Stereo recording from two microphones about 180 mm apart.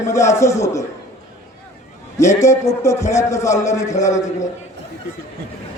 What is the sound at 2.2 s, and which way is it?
A man's voice, 15° left (ahead or behind).